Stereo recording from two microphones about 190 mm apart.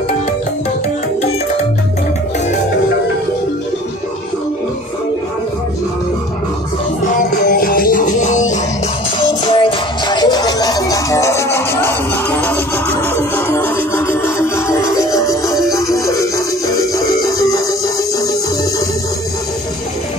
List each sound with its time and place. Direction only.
7.2 s music: 45° left (ahead or behind)
9.2 s music: 25° left (ahead or behind)